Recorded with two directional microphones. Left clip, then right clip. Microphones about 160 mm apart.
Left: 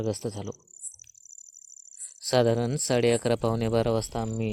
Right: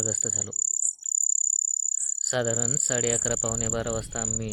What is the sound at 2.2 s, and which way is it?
Speech, 20° left (ahead or behind).